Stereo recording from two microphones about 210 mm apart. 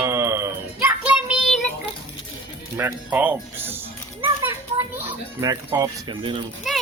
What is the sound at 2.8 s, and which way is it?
Speech, 10° right (ahead or behind).